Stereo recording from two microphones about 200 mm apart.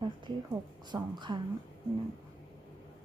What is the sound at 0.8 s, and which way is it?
Speech, 20° right (ahead or behind).